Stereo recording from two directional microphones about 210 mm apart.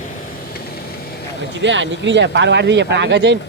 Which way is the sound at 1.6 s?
60° right (ahead or behind).